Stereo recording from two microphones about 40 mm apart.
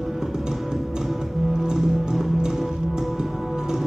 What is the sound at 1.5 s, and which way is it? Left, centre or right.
Music, centre.